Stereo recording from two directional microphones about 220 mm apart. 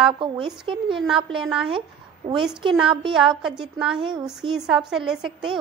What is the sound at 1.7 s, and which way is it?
A woman's voice, 25° right (ahead or behind).